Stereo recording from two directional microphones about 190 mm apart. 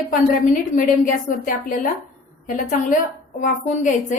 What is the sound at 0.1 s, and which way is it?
A woman's voice, 45° left (ahead or behind).